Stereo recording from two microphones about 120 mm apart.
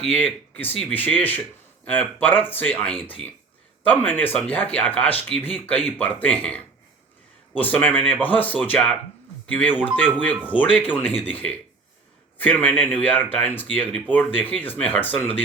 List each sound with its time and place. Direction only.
0.1 s speech: 15° left (ahead or behind)